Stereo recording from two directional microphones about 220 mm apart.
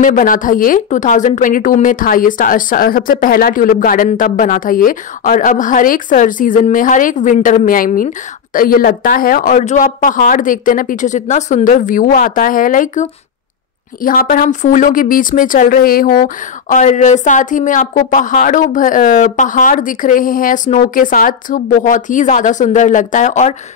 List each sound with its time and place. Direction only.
0.0 s speech: 35° left (ahead or behind)